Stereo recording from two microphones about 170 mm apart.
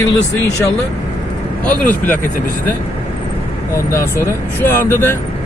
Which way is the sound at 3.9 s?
15° left (ahead or behind).